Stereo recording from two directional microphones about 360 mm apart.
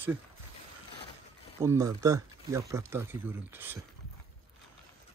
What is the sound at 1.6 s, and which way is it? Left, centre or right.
Speech, centre.